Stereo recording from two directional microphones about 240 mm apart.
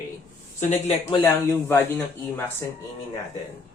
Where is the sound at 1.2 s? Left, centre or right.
Centre.